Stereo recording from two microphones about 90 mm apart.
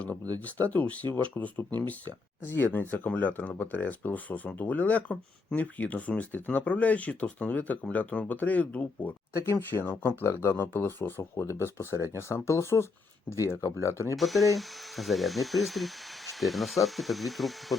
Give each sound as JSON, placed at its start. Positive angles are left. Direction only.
{"t": 0.3, "sound": "speech", "side_deg": 20}
{"t": 14.2, "sound": "speech", "side_deg": 0}